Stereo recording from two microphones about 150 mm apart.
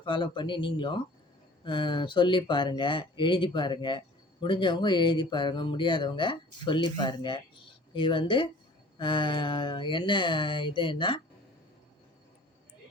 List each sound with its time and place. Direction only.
0.0 s speech: 30° left (ahead or behind)